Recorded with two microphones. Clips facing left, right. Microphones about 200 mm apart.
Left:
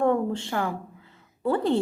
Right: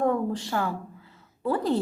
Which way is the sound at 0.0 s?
25° left (ahead or behind).